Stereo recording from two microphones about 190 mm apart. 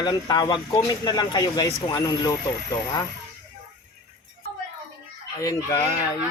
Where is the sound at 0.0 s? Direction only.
20° left (ahead or behind).